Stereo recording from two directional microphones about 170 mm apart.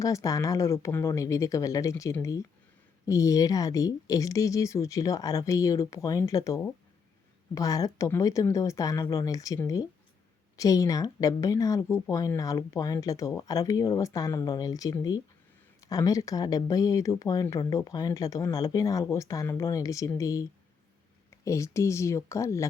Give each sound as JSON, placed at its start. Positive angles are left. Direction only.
{"t": 0.0, "sound": "speech", "side_deg": 20}